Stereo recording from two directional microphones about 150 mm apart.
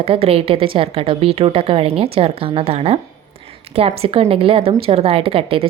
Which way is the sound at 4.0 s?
40° right (ahead or behind).